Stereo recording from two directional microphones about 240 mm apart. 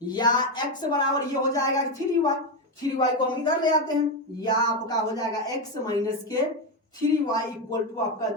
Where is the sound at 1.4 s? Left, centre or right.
Centre.